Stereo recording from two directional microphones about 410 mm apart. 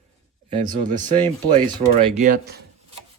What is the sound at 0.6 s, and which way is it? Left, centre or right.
Speech, centre.